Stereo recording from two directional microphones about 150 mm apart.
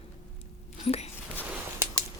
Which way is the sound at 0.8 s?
45° left (ahead or behind).